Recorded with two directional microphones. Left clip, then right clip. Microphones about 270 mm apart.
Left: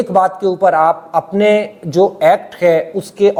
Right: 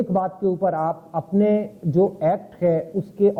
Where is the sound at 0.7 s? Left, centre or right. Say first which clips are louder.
Left 12 dB; centre.